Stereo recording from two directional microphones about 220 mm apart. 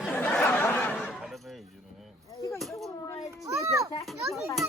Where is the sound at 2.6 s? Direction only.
Centre (ahead or behind).